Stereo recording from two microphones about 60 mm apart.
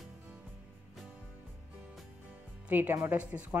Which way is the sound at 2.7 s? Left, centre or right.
Right.